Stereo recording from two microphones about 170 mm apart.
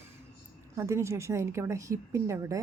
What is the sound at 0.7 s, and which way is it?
Speech, 15° right (ahead or behind).